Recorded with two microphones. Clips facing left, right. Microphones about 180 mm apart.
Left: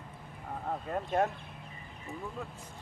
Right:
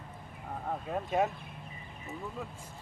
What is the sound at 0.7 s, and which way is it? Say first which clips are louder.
Speech: even; centre (ahead or behind).